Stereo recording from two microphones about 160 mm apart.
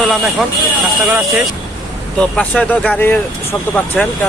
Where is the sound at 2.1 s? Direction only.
5° left (ahead or behind).